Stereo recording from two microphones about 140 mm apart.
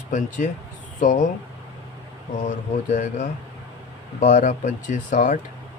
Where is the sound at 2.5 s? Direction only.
70° left (ahead or behind).